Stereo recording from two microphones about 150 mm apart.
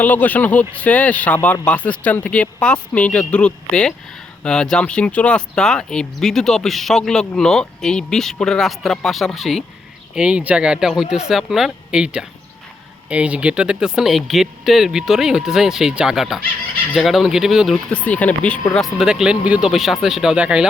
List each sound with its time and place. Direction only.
0.0 s speech: 10° left (ahead or behind)
17.9 s speech: 10° left (ahead or behind); by 20.7 s 5° right (ahead or behind)